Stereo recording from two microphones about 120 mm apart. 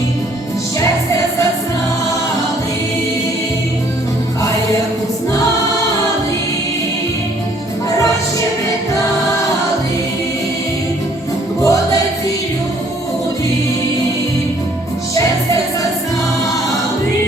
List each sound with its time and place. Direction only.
11.6 s music: 30° left (ahead or behind)
15.1 s music: 30° left (ahead or behind)